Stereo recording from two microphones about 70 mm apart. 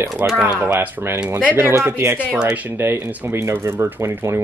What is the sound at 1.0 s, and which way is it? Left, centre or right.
Speech, right.